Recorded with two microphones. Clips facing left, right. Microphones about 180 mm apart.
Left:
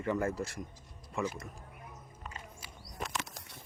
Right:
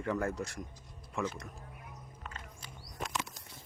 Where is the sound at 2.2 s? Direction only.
10° left (ahead or behind).